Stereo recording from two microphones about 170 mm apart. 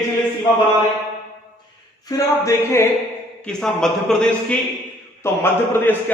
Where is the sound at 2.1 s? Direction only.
20° left (ahead or behind).